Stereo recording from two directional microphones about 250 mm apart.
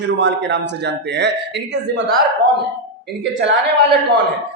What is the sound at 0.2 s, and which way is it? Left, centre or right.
A man's voice, right.